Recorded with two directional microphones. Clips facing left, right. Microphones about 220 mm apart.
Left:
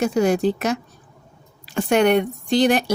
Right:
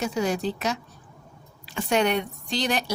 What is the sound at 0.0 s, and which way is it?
Speech, 50° left (ahead or behind).